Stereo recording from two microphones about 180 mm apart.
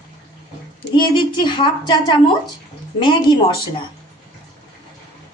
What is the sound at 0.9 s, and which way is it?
A woman's voice, 25° left (ahead or behind).